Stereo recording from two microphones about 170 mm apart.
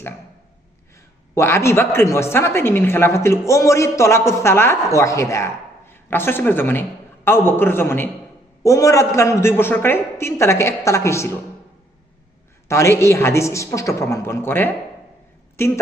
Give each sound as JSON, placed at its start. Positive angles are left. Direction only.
{"t": 1.4, "sound": "a woman's voice", "side_deg": 15}
{"t": 12.6, "sound": "a woman's voice", "side_deg": 15}